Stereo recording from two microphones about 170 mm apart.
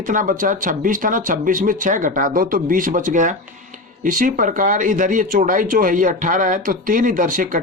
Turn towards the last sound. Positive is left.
turn(degrees=-50)  # may be behind; listen again after turning